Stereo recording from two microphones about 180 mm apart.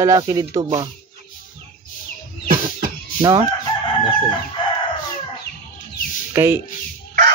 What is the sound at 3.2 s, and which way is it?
Crowing, 20° right (ahead or behind).